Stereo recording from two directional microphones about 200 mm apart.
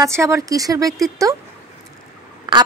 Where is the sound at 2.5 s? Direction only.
20° right (ahead or behind).